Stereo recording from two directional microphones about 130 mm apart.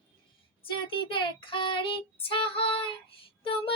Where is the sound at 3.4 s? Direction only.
45° left (ahead or behind).